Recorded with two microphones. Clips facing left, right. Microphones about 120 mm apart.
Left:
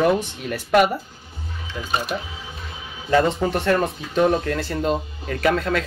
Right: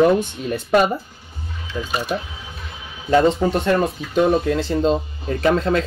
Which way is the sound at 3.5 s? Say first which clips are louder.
Right 2 dB; 20° right (ahead or behind).